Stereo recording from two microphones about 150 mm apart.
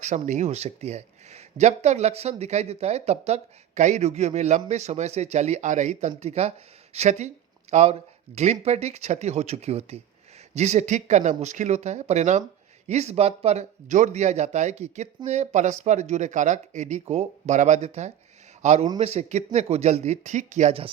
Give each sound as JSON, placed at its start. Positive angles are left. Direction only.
{"t": 0.0, "sound": "speech", "side_deg": -50}